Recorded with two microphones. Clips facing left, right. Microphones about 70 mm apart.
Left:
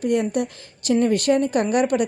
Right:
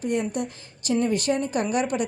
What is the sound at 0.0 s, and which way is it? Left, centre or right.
A woman's voice, left.